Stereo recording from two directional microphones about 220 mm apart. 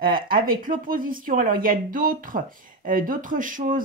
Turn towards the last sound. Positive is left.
turn(degrees=-35)  # may be behind; listen again after turning